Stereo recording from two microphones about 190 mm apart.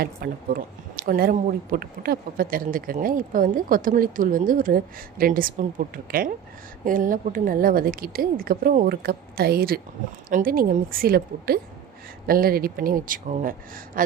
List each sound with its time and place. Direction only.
0.0 s speech: 50° right (ahead or behind)